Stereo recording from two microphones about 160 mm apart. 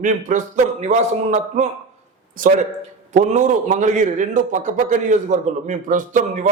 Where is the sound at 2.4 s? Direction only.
60° right (ahead or behind).